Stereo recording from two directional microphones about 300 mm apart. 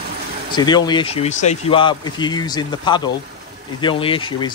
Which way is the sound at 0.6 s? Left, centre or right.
Centre.